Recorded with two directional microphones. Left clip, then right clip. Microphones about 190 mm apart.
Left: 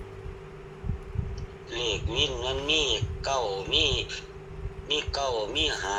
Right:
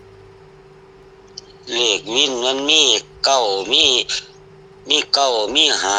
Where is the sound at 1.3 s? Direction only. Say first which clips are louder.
Right 14 dB; 65° right (ahead or behind).